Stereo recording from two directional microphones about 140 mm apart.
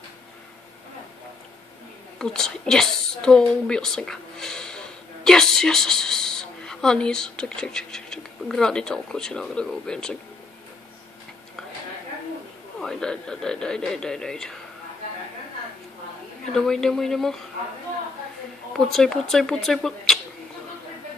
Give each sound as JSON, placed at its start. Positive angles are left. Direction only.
{"t": 2.1, "sound": "speech", "side_deg": 5}
{"t": 12.8, "sound": "a man's voice", "side_deg": 5}
{"t": 16.5, "sound": "a man's voice", "side_deg": 5}
{"t": 18.7, "sound": "a man's voice", "side_deg": 5}